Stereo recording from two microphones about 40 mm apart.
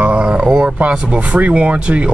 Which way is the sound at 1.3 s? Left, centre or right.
Right.